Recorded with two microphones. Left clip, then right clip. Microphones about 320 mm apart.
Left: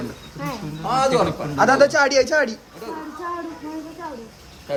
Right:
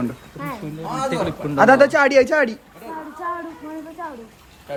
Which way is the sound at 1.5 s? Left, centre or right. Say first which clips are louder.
Right 3 dB; right.